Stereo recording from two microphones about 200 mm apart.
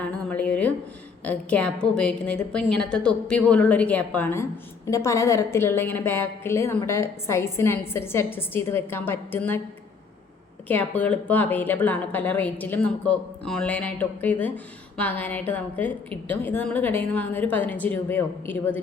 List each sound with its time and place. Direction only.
0.3 s a sound: 5° left (ahead or behind)
1.2 s a woman's voice: 5° left (ahead or behind)
10.7 s a woman's voice: 10° left (ahead or behind)